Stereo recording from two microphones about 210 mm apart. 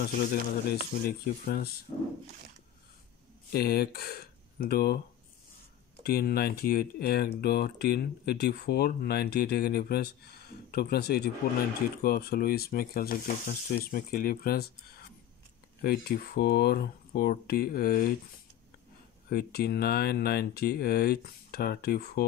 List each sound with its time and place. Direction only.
0.0 s speech: 45° left (ahead or behind)
3.5 s speech: 45° left (ahead or behind)
6.0 s speech: 45° left (ahead or behind)
19.2 s speech: 45° left (ahead or behind)